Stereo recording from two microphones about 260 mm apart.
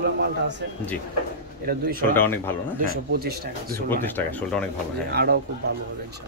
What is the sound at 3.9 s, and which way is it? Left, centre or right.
Speech, centre.